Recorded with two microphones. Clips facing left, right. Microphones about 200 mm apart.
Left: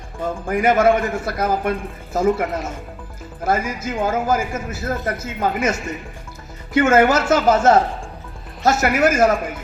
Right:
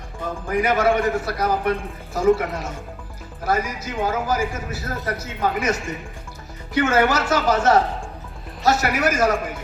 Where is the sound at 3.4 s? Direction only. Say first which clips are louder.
Left 2 dB; 50° left (ahead or behind).